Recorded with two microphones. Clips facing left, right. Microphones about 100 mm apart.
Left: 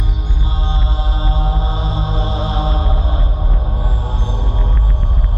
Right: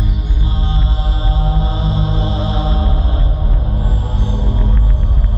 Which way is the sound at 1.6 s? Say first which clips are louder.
Right 2 dB; 20° left (ahead or behind).